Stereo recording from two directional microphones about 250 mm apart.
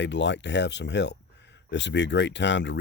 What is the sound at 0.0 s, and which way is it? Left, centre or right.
Speech, left.